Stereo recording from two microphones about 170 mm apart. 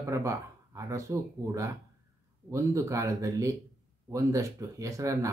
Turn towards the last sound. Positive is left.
turn(degrees=-20)  # may be behind; listen again after turning